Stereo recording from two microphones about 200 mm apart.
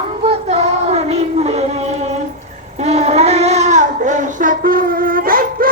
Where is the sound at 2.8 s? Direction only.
35° right (ahead or behind).